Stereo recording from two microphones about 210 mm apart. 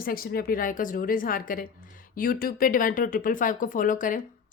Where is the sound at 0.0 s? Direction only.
45° left (ahead or behind).